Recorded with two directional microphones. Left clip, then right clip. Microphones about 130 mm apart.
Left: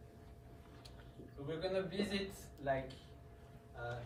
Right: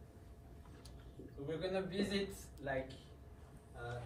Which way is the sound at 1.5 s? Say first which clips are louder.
Left 1 dB; 15° left (ahead or behind).